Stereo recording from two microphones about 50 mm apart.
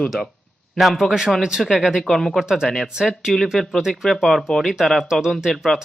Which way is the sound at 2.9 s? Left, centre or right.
Centre.